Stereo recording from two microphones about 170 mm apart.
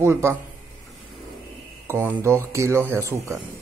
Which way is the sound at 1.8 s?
15° right (ahead or behind).